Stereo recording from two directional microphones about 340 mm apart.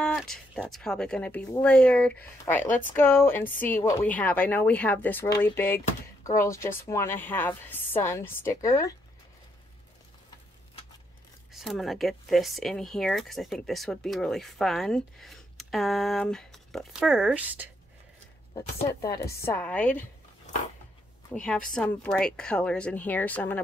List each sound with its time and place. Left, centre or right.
0.0 s speech: centre
2.6 s speech: left
3.0 s a woman's voice: centre
11.5 s speech: centre
18.5 s a woman's voice: centre
21.3 s speech: centre